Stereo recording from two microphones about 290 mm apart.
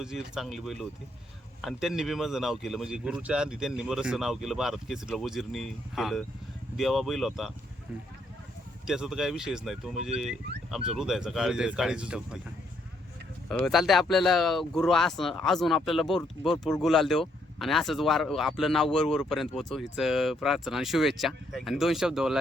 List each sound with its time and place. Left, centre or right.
0.0 s speech: centre
8.9 s speech: centre
13.5 s speech: centre